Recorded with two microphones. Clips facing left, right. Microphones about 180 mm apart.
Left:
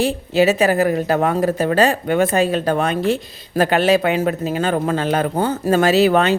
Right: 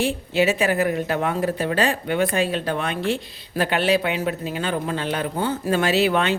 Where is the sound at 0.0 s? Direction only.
40° left (ahead or behind).